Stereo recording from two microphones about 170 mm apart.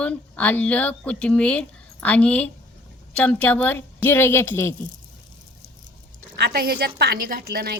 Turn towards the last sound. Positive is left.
turn(degrees=-65)  # may be behind; listen again after turning